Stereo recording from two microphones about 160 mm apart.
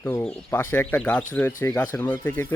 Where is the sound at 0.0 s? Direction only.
15° left (ahead or behind).